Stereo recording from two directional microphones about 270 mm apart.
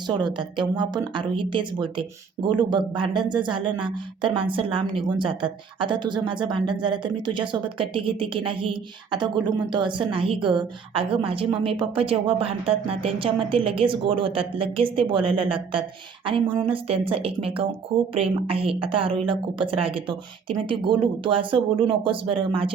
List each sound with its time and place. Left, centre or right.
0.1 s a woman's voice: centre